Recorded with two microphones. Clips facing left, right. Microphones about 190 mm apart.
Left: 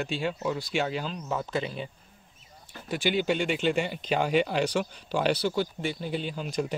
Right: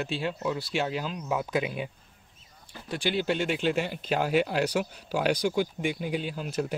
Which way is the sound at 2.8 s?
Centre (ahead or behind).